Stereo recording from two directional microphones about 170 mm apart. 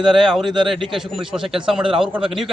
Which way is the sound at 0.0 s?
Centre (ahead or behind).